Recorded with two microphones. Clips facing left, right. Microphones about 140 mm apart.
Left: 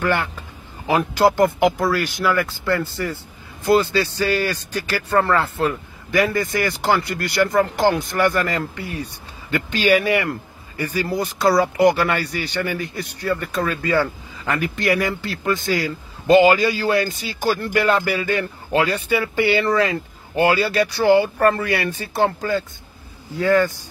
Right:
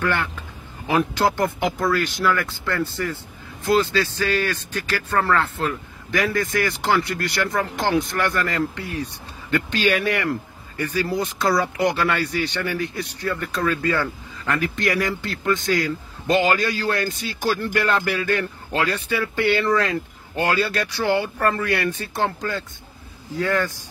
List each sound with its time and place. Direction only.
0.0 s a man's voice: 20° left (ahead or behind)
0.8 s speech: 5° left (ahead or behind)